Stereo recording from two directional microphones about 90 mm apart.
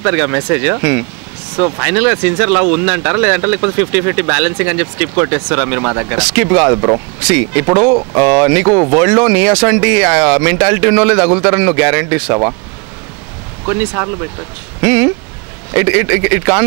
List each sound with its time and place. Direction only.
0.0 s speech: 25° right (ahead or behind)
13.7 s speech: 25° right (ahead or behind)